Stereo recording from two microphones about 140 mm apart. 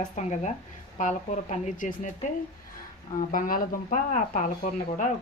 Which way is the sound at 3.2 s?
75° left (ahead or behind).